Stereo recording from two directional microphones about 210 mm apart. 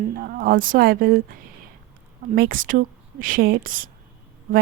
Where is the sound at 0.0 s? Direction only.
45° right (ahead or behind).